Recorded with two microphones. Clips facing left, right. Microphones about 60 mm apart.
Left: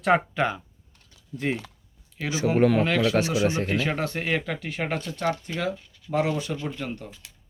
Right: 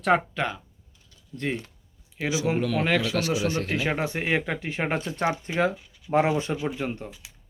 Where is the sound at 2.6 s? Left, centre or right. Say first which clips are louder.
Left 6 dB; left.